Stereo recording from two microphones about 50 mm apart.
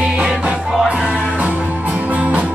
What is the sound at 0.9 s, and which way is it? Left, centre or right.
Music, right.